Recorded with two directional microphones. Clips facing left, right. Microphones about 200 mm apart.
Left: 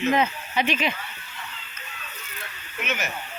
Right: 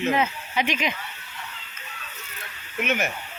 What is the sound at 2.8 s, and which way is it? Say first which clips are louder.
Speech: right 5 dB; 55° right (ahead or behind).